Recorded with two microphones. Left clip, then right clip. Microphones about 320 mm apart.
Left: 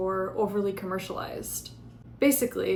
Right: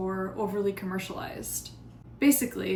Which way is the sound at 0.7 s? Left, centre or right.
Centre.